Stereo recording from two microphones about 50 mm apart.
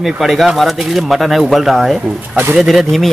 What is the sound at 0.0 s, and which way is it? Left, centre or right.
Speech, centre.